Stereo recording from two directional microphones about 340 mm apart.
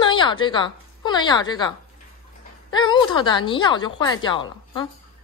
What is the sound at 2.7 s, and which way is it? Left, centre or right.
Speech, centre.